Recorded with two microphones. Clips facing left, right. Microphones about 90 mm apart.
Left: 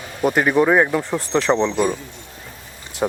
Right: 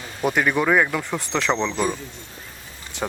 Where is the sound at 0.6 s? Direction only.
20° left (ahead or behind).